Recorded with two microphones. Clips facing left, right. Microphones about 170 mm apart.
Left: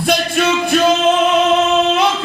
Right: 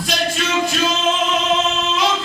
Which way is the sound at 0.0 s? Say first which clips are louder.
Left 6 dB; 60° left (ahead or behind).